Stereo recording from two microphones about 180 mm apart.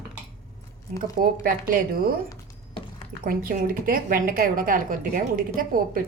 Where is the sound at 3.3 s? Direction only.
50° right (ahead or behind).